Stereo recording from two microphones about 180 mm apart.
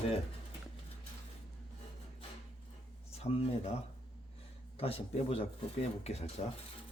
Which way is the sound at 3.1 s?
35° left (ahead or behind).